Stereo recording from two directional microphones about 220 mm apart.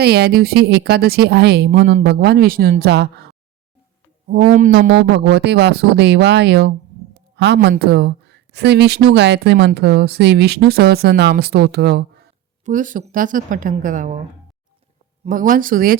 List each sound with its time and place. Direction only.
0.0 s a man's voice: 45° right (ahead or behind)
12.6 s a woman's voice: 35° right (ahead or behind)
15.2 s a woman's voice: 35° right (ahead or behind)